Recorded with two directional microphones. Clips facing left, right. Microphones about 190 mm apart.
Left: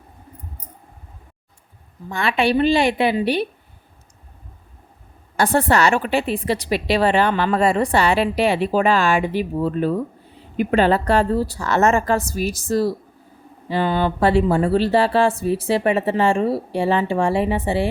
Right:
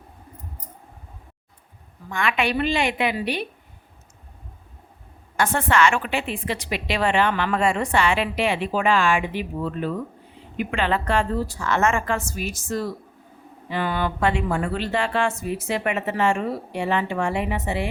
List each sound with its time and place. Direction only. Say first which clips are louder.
2.0 s a woman's voice: left 4 dB; 35° left (ahead or behind)
5.4 s a woman's voice: left 3 dB; 35° left (ahead or behind)